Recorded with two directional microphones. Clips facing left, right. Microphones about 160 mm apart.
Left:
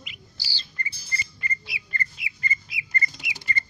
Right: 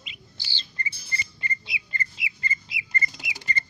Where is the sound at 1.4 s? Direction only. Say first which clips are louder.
Even; 25° right (ahead or behind).